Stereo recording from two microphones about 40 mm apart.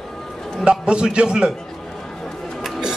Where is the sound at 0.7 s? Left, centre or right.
Right.